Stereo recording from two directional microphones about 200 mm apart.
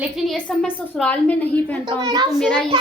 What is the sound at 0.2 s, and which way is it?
A woman's voice, 5° left (ahead or behind).